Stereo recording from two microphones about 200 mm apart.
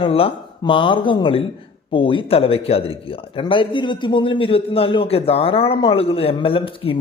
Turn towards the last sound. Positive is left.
turn(degrees=25)  # may be behind; listen again after turning